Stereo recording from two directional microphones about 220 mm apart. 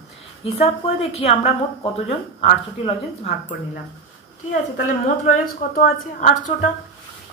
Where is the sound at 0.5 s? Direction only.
25° left (ahead or behind).